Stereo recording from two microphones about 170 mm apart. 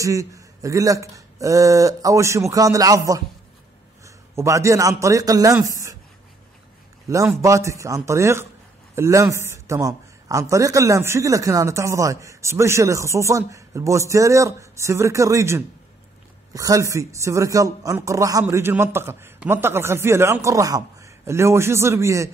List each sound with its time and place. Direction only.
0.0 s a man's voice: 20° right (ahead or behind)
7.1 s a man's voice: 20° right (ahead or behind)